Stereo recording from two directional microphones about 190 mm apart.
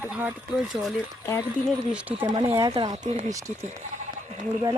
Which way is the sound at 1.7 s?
5° right (ahead or behind).